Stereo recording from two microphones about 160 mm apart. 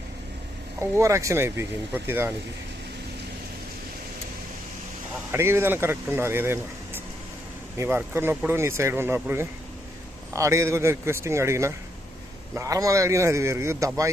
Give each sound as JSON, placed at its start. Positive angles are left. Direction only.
{"t": 0.8, "sound": "speech", "side_deg": -15}
{"t": 5.3, "sound": "speech", "side_deg": -15}